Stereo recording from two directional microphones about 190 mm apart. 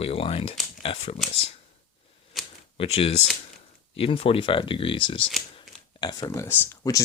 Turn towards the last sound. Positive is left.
turn(degrees=15)  # may be behind; listen again after turning